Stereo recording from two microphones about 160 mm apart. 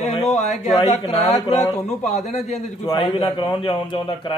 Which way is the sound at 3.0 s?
30° left (ahead or behind).